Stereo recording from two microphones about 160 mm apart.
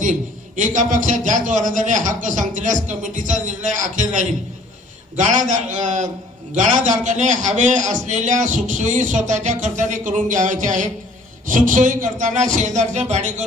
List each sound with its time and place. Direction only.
0.0 s a man's voice: 50° right (ahead or behind)